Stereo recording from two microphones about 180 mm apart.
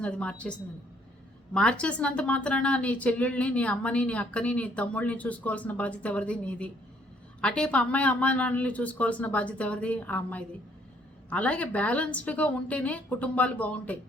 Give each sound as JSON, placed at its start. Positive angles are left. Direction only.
{"t": 0.0, "sound": "speech", "side_deg": 5}